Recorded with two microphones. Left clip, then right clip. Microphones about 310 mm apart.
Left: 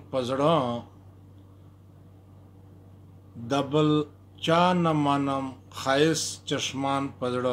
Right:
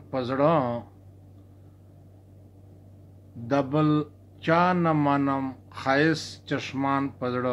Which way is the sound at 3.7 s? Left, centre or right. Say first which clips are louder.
Left 1 dB; centre.